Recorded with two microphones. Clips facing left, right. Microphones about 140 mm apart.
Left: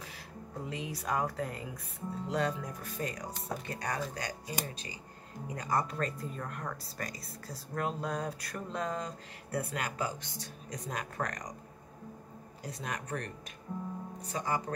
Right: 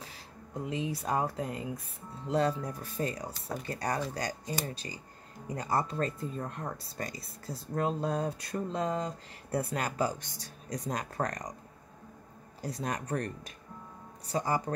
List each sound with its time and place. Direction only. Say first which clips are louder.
0.7 s speech: right 4 dB; 25° right (ahead or behind)
12.6 s speech: right 5 dB; 35° right (ahead or behind)